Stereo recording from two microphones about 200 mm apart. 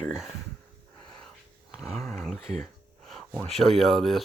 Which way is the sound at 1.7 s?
Centre (ahead or behind).